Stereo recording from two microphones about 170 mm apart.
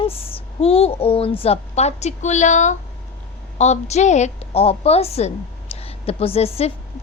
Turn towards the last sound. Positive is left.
turn(degrees=35)  # may be behind; listen again after turning